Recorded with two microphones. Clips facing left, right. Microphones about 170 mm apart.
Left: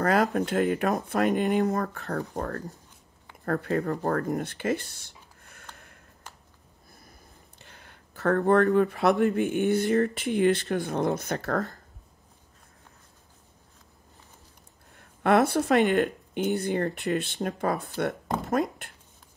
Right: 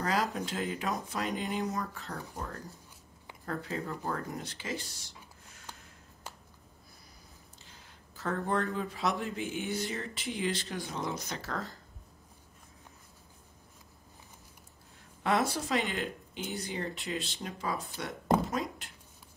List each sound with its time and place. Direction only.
0.0 s speech: 60° left (ahead or behind)
3.4 s speech: 65° left (ahead or behind)
7.5 s speech: 60° left (ahead or behind)
15.0 s speech: 60° left (ahead or behind)